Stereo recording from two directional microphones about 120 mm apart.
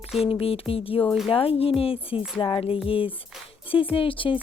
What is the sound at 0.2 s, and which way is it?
Speech, 50° left (ahead or behind).